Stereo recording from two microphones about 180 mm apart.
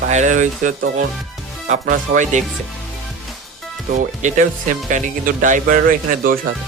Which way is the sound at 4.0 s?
45° right (ahead or behind).